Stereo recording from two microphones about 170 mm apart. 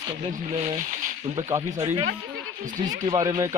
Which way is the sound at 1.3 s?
20° right (ahead or behind).